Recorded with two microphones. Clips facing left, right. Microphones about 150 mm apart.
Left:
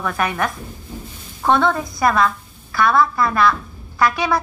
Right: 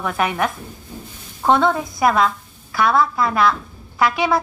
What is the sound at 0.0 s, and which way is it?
A woman's voice, 20° right (ahead or behind).